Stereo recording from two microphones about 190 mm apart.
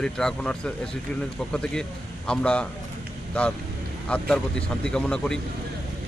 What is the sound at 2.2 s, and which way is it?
Speech, 5° left (ahead or behind).